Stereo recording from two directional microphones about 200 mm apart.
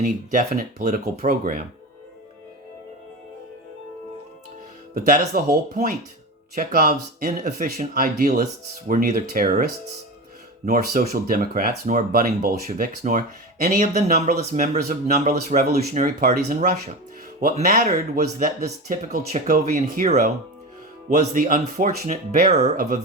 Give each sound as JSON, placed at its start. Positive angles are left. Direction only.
{"t": 0.0, "sound": "speech", "side_deg": -40}
{"t": 4.9, "sound": "speech", "side_deg": -45}
{"t": 6.6, "sound": "speech", "side_deg": -40}
{"t": 10.7, "sound": "speech", "side_deg": -40}